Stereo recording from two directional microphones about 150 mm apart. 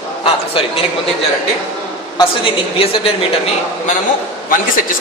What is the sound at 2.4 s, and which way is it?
Speech, 40° left (ahead or behind).